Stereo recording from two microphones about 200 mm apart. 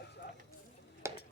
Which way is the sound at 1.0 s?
15° right (ahead or behind).